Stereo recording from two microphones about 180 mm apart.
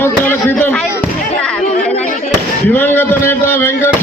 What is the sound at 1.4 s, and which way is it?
Music, 5° left (ahead or behind).